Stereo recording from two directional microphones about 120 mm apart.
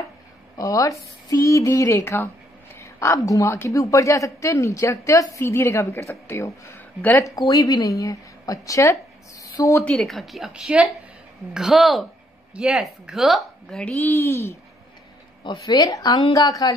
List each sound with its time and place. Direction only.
0.6 s a woman's voice: 30° left (ahead or behind)
9.4 s a sound: 25° left (ahead or behind)
9.8 s a woman's voice: centre (ahead or behind); by 14.6 s 20° left (ahead or behind)
15.4 s a woman's voice: 35° left (ahead or behind)